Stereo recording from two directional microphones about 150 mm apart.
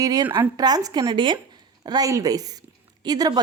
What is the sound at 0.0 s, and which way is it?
A woman's voice, 25° right (ahead or behind).